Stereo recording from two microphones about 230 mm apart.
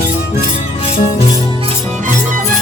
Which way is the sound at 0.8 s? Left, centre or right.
Left.